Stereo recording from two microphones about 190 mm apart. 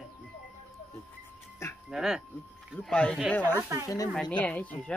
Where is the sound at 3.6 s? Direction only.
15° right (ahead or behind).